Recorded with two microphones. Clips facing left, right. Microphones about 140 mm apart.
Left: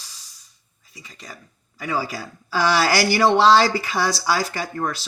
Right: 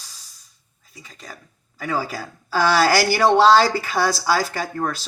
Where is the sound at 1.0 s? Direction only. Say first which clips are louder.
Right 1 dB; 50° right (ahead or behind).